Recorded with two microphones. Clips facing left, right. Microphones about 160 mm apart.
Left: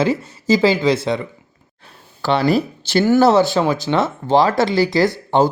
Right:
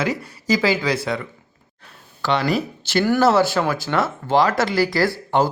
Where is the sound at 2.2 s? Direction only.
35° left (ahead or behind).